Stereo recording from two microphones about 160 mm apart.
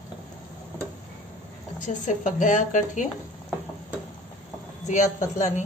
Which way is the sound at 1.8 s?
50° left (ahead or behind).